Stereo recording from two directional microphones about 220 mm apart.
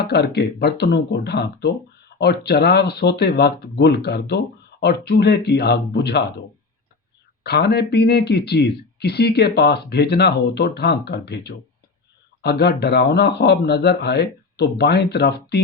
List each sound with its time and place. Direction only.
0.0 s speech: 50° left (ahead or behind)
7.4 s speech: 45° left (ahead or behind)